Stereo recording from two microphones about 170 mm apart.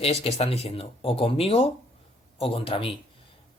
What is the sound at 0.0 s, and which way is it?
Speech, 35° left (ahead or behind).